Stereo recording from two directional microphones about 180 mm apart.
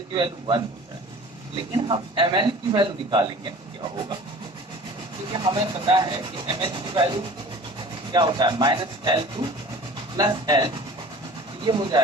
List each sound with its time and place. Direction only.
0.1 s rub: 25° right (ahead or behind)
1.7 s rub: 25° right (ahead or behind)
5.3 s rub: 25° right (ahead or behind)